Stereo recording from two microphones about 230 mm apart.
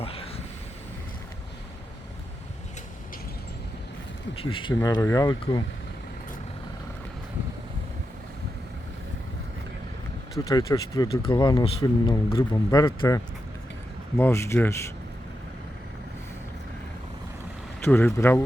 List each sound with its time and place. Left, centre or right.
4.4 s speech: left
10.3 s speech: centre
17.8 s speech: centre